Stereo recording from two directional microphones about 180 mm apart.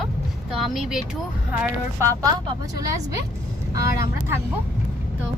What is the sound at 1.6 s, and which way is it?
Speech, 15° right (ahead or behind).